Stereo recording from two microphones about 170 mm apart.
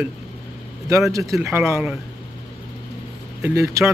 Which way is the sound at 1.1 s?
20° right (ahead or behind).